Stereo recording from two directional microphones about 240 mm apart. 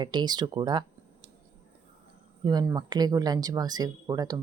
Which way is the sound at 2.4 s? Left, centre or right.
Centre.